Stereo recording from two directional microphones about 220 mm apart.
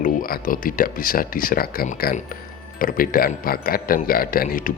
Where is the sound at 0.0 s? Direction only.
40° left (ahead or behind).